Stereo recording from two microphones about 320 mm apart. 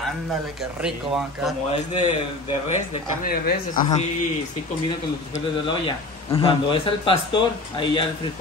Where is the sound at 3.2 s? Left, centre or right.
Left.